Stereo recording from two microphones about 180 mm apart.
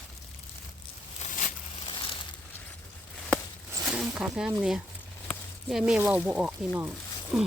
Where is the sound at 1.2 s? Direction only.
40° left (ahead or behind).